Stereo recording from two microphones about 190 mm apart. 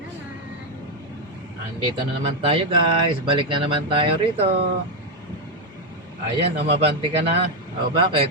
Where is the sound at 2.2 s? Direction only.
30° right (ahead or behind).